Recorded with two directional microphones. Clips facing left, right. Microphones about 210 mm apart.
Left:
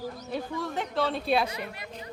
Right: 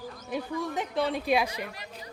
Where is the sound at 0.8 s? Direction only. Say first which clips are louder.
Left 1 dB; 10° right (ahead or behind).